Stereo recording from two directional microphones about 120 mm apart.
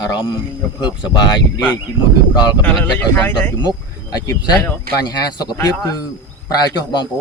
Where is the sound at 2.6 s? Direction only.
15° left (ahead or behind).